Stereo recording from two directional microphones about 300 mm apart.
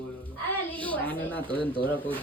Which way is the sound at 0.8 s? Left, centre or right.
Centre.